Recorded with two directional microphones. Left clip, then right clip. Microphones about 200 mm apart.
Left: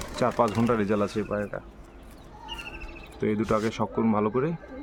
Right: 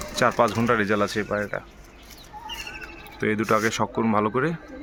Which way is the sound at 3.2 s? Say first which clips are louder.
Right 4 dB; centre (ahead or behind).